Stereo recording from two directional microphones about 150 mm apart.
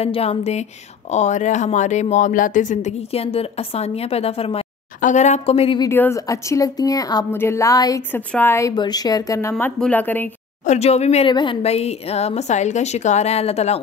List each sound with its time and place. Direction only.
0.0 s speech: 45° left (ahead or behind)
5.8 s a woman's voice: 15° left (ahead or behind)
8.1 s a woman's voice: 10° left (ahead or behind)
10.6 s speech: 50° left (ahead or behind)
11.2 s speech: 35° left (ahead or behind)